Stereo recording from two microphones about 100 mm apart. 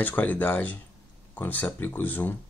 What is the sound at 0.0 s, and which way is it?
Speech, 15° left (ahead or behind).